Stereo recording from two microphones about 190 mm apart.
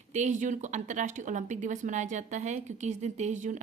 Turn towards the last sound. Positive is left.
turn(degrees=-40)  # may be behind; listen again after turning